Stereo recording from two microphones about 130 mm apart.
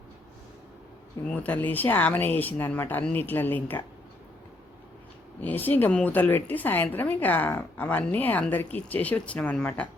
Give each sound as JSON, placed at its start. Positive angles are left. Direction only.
{"t": 1.3, "sound": "a woman's voice", "side_deg": 15}
{"t": 5.4, "sound": "a woman's voice", "side_deg": 15}